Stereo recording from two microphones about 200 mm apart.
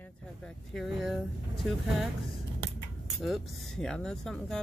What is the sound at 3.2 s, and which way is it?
Speech, centre (ahead or behind).